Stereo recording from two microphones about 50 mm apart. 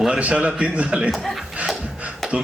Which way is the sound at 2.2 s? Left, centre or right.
Centre.